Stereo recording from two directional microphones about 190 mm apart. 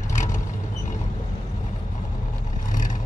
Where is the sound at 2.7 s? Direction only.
45° left (ahead or behind).